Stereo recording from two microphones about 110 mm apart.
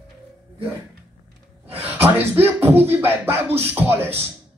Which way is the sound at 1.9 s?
20° right (ahead or behind).